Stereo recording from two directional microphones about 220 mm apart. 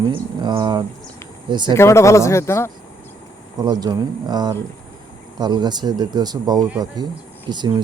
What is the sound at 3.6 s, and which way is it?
Speech, 20° right (ahead or behind).